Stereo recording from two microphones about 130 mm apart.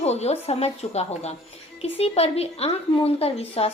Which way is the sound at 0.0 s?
55° left (ahead or behind).